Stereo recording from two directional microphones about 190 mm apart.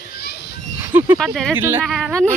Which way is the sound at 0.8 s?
10° right (ahead or behind).